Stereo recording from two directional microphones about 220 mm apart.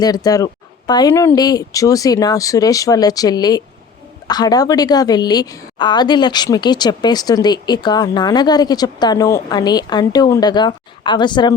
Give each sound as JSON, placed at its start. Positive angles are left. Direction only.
{"t": 0.0, "sound": "a woman's voice", "side_deg": 15}